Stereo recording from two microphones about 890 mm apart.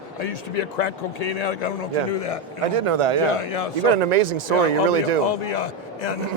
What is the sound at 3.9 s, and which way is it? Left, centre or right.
Speech, right.